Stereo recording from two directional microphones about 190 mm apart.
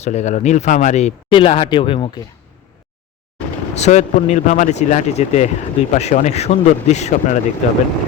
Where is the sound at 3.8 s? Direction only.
35° left (ahead or behind).